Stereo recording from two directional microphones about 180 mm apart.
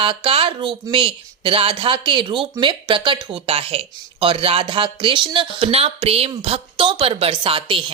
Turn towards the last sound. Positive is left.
turn(degrees=-30)  # may be behind; listen again after turning